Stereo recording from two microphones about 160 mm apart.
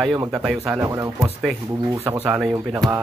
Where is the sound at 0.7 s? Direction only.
20° right (ahead or behind).